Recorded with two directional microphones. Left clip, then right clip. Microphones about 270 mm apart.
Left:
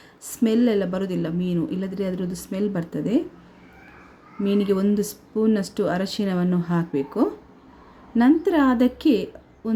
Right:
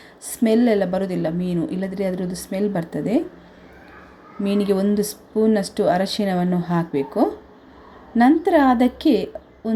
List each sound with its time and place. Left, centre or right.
0.3 s speech: centre
4.4 s speech: left
4.7 s speech: centre